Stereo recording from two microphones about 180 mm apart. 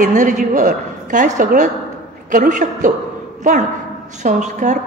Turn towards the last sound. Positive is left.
turn(degrees=-45)  # may be behind; listen again after turning